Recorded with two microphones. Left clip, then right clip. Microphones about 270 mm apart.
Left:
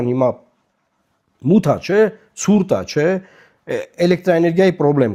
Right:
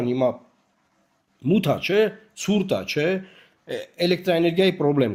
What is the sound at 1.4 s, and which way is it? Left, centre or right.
Speech, left.